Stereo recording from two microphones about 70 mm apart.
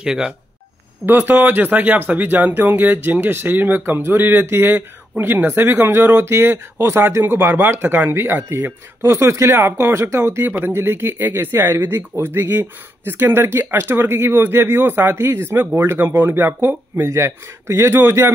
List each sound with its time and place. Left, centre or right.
0.0 s speech: centre
1.0 s speech: right